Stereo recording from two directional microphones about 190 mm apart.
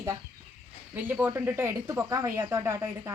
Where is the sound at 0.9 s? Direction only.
10° right (ahead or behind).